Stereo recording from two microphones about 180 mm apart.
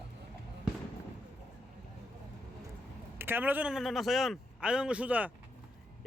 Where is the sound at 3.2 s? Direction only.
10° right (ahead or behind).